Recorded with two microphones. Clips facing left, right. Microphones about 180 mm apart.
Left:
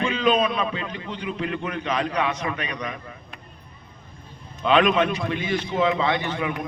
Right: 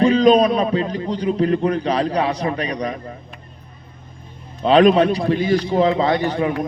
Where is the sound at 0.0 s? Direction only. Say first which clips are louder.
Right 9 dB; 35° right (ahead or behind).